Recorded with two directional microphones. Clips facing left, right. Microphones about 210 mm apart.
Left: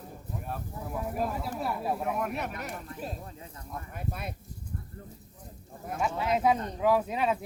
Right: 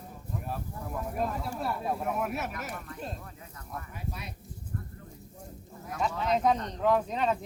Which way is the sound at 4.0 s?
55° left (ahead or behind).